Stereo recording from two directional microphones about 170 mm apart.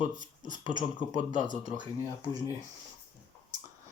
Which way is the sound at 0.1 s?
50° right (ahead or behind).